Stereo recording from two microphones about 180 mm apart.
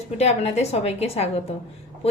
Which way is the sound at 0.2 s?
35° left (ahead or behind).